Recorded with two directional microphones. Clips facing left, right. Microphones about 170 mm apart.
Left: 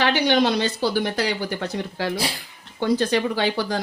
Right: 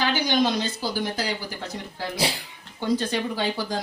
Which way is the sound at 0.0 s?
70° left (ahead or behind).